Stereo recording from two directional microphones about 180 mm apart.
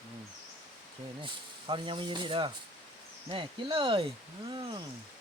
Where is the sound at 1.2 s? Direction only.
30° right (ahead or behind).